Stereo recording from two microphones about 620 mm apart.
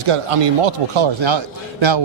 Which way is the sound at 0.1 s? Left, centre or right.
Right.